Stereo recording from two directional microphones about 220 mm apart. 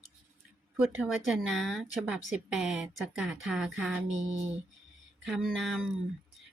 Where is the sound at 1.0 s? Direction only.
Centre (ahead or behind).